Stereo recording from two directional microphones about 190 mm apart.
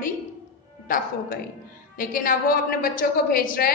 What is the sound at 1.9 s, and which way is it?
A woman's voice, 45° left (ahead or behind).